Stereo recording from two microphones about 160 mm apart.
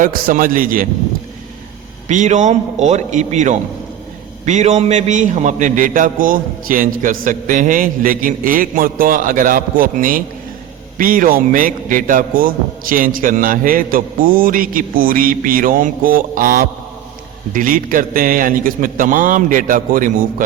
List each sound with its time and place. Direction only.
0.0 s a man's voice: 60° right (ahead or behind)
2.0 s a man's voice: 50° right (ahead or behind)